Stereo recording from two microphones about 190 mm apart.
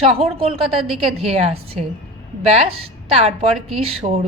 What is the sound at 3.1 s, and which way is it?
A woman's voice, 35° right (ahead or behind).